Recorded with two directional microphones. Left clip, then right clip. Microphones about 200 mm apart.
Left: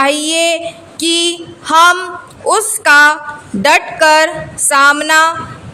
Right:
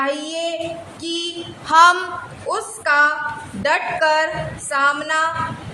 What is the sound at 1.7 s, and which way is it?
Speech, 25° left (ahead or behind).